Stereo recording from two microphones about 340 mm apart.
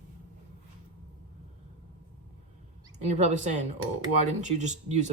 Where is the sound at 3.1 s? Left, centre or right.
Centre.